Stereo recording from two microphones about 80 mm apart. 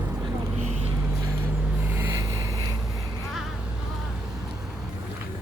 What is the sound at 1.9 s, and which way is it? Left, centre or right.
Boat, right.